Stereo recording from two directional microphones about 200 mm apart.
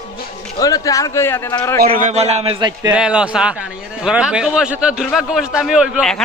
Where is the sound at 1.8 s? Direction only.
45° right (ahead or behind); by 2.9 s 20° right (ahead or behind).